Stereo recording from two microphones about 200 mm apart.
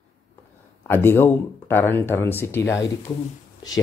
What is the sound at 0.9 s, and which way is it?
Speech, 10° left (ahead or behind).